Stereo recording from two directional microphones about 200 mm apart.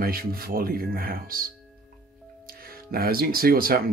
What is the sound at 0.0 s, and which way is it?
Speech, 45° right (ahead or behind).